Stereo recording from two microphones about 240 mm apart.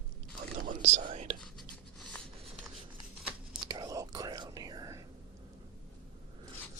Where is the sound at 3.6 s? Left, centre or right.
Centre.